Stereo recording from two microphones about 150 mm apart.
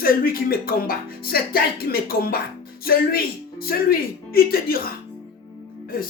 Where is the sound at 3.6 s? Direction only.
85° left.